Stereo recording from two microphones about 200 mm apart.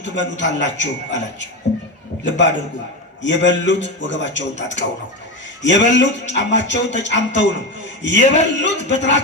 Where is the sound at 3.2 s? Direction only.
65° left (ahead or behind).